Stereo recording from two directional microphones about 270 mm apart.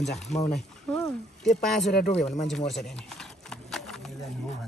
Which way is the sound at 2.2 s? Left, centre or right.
Centre.